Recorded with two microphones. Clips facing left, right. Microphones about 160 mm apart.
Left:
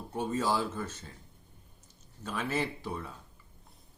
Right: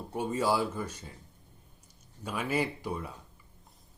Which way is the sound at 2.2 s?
10° right (ahead or behind).